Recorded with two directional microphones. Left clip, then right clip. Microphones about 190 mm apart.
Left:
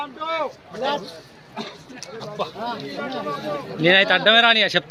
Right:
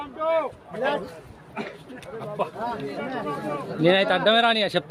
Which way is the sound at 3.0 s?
40° right (ahead or behind).